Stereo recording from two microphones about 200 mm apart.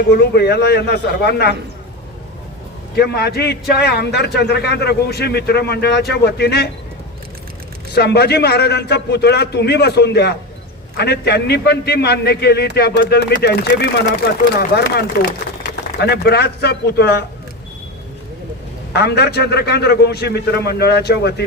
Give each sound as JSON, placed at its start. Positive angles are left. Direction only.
{"t": 0.1, "sound": "a man's voice", "side_deg": 55}
{"t": 2.9, "sound": "a man's voice", "side_deg": 55}
{"t": 7.9, "sound": "a man's voice", "side_deg": 55}
{"t": 15.7, "sound": "speech", "side_deg": 55}
{"t": 18.9, "sound": "a man's voice", "side_deg": 55}